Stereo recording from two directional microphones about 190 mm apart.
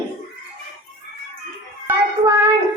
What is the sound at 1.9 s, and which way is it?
Child singing, 15° right (ahead or behind).